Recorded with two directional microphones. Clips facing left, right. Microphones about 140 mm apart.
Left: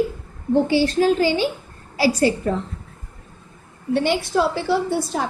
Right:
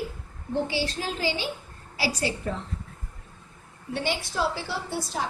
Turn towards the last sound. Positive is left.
turn(degrees=60)  # may be behind; listen again after turning